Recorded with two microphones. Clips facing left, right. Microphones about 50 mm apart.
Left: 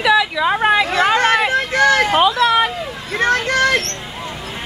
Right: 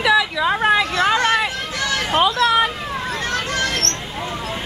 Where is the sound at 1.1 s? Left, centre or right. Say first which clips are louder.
Left 3 dB; left.